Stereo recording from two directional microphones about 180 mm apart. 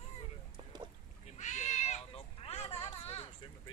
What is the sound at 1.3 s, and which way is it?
Cat, 40° left (ahead or behind).